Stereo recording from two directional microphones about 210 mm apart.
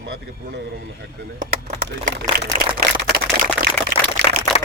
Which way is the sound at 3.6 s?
50° right (ahead or behind).